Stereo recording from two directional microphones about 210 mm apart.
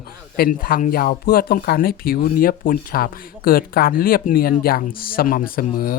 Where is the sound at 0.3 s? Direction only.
45° left (ahead or behind).